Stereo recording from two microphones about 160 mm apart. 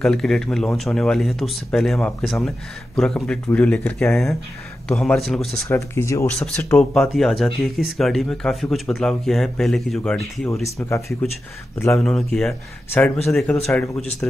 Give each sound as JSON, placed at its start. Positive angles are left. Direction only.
{"t": 0.0, "sound": "speech", "side_deg": 5}
{"t": 5.7, "sound": "speech", "side_deg": 15}
{"t": 6.3, "sound": "speech", "side_deg": 5}
{"t": 10.5, "sound": "speech", "side_deg": 15}
{"t": 11.9, "sound": "speech", "side_deg": 5}